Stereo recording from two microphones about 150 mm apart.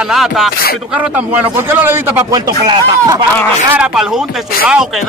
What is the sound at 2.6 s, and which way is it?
Speech, 25° right (ahead or behind).